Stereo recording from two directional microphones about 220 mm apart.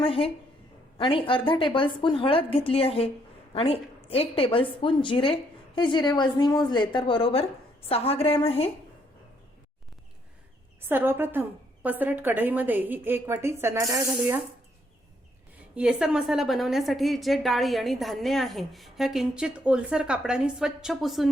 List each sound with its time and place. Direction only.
0.0 s a woman's voice: 25° left (ahead or behind)
10.8 s a woman's voice: 10° right (ahead or behind)
15.7 s a woman's voice: 5° right (ahead or behind)